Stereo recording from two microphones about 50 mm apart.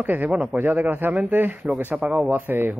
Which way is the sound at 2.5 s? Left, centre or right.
Right.